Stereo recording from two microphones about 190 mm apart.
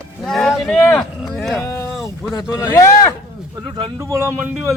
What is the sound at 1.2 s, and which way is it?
Speech, centre (ahead or behind).